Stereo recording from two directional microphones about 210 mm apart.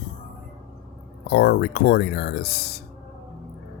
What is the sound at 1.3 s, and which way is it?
Speech, 50° left (ahead or behind).